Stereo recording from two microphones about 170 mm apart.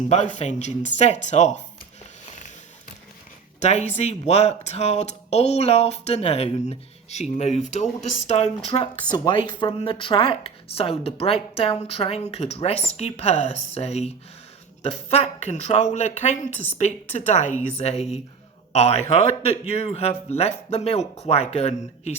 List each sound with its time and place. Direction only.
0.1 s speech: 40° left (ahead or behind)
3.6 s a woman's voice: 40° left (ahead or behind)